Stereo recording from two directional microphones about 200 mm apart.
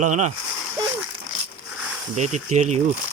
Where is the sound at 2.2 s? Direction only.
35° right (ahead or behind).